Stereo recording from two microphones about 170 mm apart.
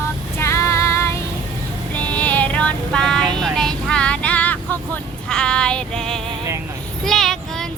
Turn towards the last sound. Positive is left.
turn(degrees=0)  # may be behind; listen again after turning